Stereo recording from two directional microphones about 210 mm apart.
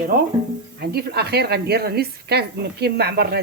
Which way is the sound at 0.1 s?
45° right (ahead or behind).